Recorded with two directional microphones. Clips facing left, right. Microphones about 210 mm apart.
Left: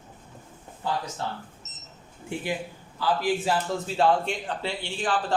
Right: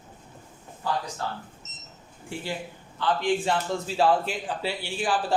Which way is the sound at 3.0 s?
5° left (ahead or behind).